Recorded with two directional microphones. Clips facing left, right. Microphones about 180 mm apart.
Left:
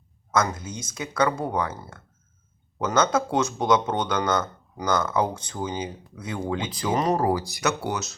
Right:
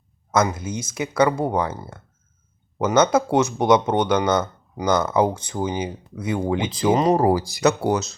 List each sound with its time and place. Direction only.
0.3 s speech: 15° right (ahead or behind); by 8.1 s 30° right (ahead or behind)